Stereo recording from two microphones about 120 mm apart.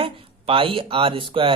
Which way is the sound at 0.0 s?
50° right (ahead or behind).